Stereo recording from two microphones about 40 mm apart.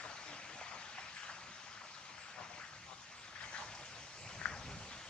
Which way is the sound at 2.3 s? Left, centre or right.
Left.